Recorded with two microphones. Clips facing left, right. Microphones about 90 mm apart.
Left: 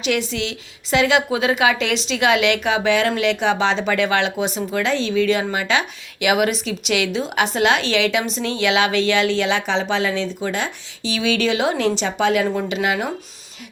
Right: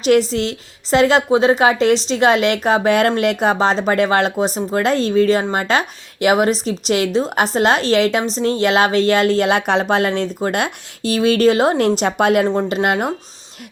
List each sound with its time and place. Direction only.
0.0 s speech: 40° right (ahead or behind)